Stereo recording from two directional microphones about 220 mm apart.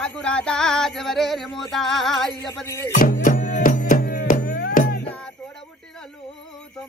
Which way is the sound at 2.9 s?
40° left (ahead or behind).